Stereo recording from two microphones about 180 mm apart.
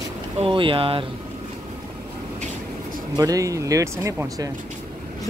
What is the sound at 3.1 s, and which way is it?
Speech, 20° right (ahead or behind).